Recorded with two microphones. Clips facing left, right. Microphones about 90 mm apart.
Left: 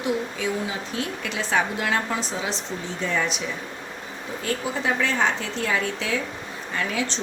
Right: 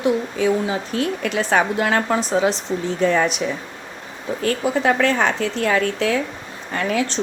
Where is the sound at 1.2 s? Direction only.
55° right (ahead or behind).